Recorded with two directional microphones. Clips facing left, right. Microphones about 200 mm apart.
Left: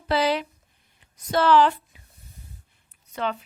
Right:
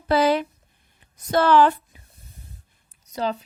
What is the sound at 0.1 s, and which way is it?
A woman's voice, 50° right (ahead or behind).